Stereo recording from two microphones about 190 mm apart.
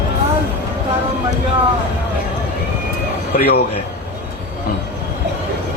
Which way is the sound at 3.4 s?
50° left (ahead or behind).